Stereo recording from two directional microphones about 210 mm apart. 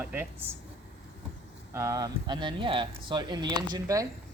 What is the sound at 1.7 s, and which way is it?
Speech, 15° right (ahead or behind).